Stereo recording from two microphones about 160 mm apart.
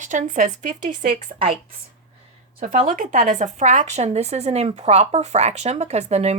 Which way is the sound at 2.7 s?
55° right (ahead or behind).